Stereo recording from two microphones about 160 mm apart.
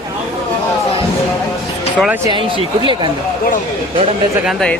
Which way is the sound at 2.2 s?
30° right (ahead or behind).